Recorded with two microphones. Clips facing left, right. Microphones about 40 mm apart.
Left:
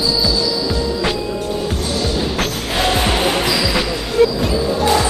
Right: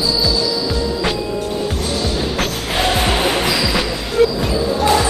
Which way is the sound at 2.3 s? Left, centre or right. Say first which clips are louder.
Even; centre.